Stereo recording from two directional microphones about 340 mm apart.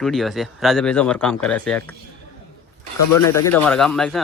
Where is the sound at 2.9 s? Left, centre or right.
Left.